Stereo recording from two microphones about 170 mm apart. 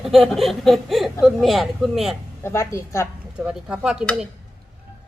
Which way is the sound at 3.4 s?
5° right (ahead or behind).